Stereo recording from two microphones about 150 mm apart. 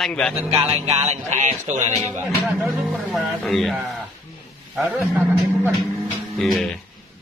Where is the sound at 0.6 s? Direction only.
40° right (ahead or behind).